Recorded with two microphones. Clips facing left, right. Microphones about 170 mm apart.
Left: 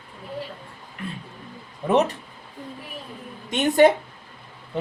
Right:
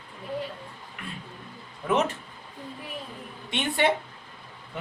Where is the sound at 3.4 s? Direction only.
40° left (ahead or behind).